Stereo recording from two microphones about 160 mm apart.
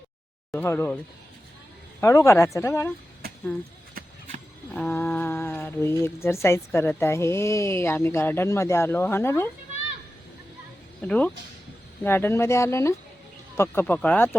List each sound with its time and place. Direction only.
0.5 s a woman's voice: 15° left (ahead or behind)
2.0 s speech: 20° left (ahead or behind)
4.7 s a sound: 10° left (ahead or behind)
5.0 s a woman's voice: 10° left (ahead or behind)
11.0 s a woman's voice: 10° left (ahead or behind)